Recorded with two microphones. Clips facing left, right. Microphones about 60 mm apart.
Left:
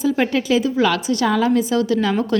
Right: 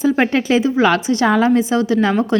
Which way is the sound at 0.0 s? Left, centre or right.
Right.